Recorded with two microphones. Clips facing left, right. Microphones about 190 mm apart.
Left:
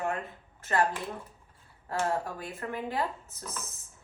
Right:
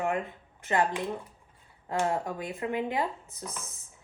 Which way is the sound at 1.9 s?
15° right (ahead or behind).